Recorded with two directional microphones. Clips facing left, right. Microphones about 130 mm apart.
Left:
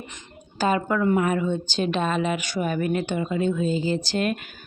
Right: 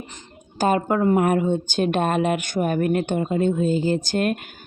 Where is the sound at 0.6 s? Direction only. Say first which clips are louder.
Right 3 dB; 45° right (ahead or behind).